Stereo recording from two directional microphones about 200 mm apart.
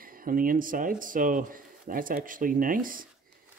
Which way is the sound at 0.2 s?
45° right (ahead or behind).